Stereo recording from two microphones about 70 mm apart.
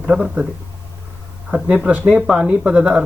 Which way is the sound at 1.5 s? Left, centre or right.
Centre.